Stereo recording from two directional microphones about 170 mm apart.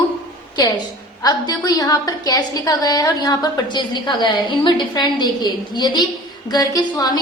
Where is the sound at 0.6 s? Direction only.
20° left (ahead or behind).